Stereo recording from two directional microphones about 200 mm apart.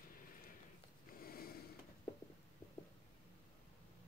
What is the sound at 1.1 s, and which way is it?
Snort, 50° left (ahead or behind).